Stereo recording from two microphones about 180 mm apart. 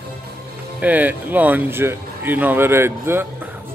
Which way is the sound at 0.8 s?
10° right (ahead or behind).